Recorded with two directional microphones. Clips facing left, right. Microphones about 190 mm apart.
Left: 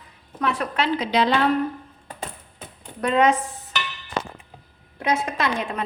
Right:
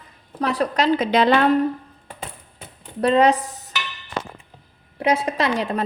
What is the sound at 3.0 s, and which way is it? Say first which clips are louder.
Dishes: right 3 dB; 35° right (ahead or behind).